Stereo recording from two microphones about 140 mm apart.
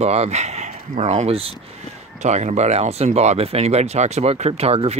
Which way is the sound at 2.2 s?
55° right (ahead or behind).